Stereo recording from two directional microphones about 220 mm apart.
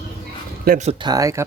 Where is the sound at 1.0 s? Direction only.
15° right (ahead or behind).